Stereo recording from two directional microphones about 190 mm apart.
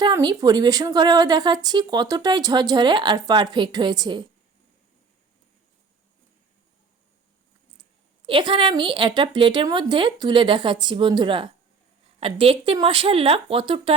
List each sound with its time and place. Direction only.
0.0 s a woman's voice: 20° right (ahead or behind)
8.3 s a woman's voice: 25° right (ahead or behind)